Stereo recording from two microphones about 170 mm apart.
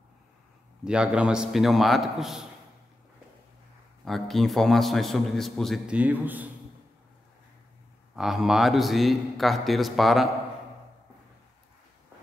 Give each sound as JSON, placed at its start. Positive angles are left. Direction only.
{"t": 0.8, "sound": "a man's voice", "side_deg": -5}
{"t": 4.0, "sound": "a man's voice", "side_deg": 0}
{"t": 8.2, "sound": "a man's voice", "side_deg": 0}